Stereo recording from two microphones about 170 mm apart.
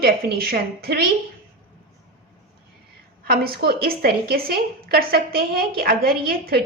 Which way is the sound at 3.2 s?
65° right (ahead or behind).